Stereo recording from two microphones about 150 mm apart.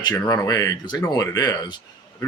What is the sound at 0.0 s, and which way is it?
Speech, 25° left (ahead or behind).